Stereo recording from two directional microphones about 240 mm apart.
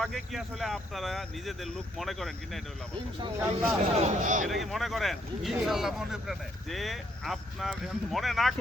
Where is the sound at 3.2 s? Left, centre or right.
Centre.